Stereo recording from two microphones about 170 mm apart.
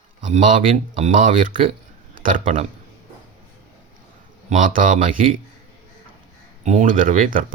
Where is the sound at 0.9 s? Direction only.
45° right (ahead or behind).